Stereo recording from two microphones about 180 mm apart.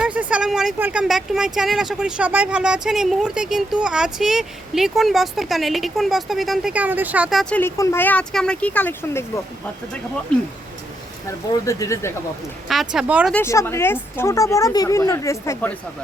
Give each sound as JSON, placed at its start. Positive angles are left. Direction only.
{"t": 0.0, "sound": "speech", "side_deg": -5}
{"t": 7.6, "sound": "speech", "side_deg": 15}
{"t": 11.3, "sound": "speech", "side_deg": 15}
{"t": 12.6, "sound": "speech", "side_deg": 0}
{"t": 13.3, "sound": "speech", "side_deg": 15}